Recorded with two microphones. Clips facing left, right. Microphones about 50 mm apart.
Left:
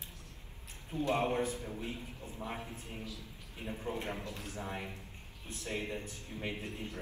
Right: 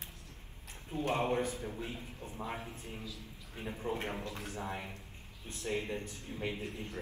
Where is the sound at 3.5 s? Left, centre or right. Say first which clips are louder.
Right 1 dB; right.